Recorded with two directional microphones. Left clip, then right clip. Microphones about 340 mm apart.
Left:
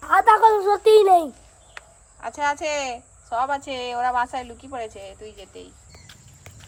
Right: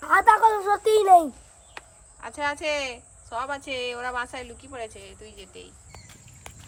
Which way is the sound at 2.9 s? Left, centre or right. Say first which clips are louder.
Left 7 dB; centre.